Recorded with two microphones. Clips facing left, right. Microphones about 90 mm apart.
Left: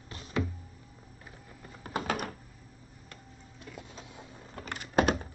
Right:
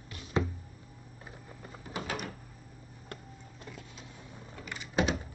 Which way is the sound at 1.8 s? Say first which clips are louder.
Left 4 dB; 50° left (ahead or behind).